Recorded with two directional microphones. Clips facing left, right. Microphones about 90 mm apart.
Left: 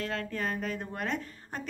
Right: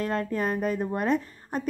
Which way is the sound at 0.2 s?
15° right (ahead or behind).